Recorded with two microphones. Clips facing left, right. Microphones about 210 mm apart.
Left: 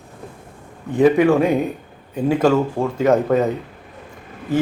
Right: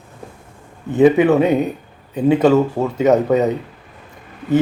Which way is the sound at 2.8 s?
5° right (ahead or behind).